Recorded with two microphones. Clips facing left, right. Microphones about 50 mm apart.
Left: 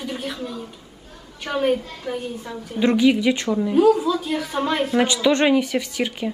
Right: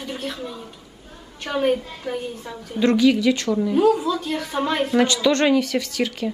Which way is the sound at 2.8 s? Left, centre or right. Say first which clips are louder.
Even; centre.